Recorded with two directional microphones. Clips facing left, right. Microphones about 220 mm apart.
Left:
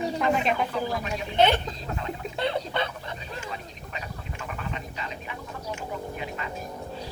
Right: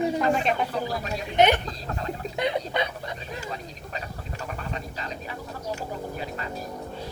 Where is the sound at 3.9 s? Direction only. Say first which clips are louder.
Right 1 dB; 40° right (ahead or behind).